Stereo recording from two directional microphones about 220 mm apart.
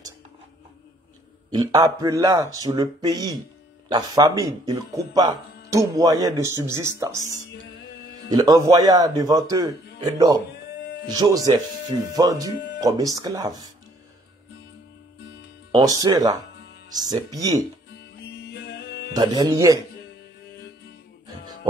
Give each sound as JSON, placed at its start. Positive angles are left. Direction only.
{"t": 1.5, "sound": "speech", "side_deg": -15}
{"t": 8.3, "sound": "speech", "side_deg": -15}
{"t": 10.8, "sound": "music", "side_deg": 55}
{"t": 11.1, "sound": "speech", "side_deg": -15}
{"t": 15.7, "sound": "speech", "side_deg": -20}
{"t": 17.9, "sound": "music", "side_deg": 50}
{"t": 19.1, "sound": "speech", "side_deg": -15}